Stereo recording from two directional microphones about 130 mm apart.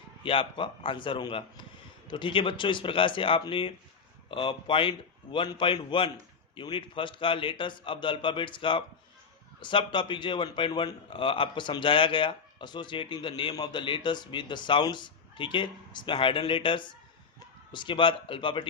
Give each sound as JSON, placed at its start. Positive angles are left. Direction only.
{"t": 0.2, "sound": "a man's voice", "side_deg": 45}